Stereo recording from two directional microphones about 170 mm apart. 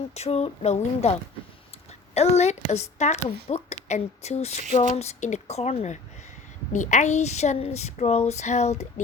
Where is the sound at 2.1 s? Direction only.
40° left (ahead or behind).